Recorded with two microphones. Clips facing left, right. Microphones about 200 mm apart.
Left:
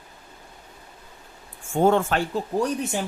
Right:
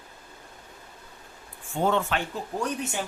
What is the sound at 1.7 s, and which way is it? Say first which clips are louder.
Speech: left 6 dB; 45° left (ahead or behind).